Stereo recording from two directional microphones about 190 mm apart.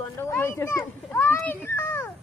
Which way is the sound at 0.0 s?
10° left (ahead or behind).